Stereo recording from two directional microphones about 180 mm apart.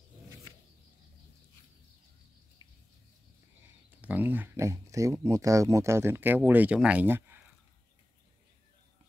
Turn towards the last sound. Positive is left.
turn(degrees=-10)  # may be behind; listen again after turning